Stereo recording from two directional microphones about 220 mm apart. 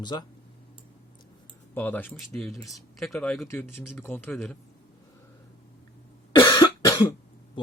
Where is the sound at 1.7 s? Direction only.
10° left (ahead or behind).